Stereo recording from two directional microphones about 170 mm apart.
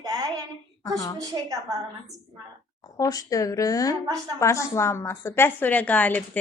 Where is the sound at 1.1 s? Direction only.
20° right (ahead or behind).